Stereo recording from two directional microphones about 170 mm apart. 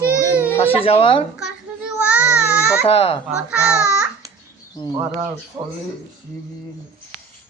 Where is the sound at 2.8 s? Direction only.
35° left (ahead or behind).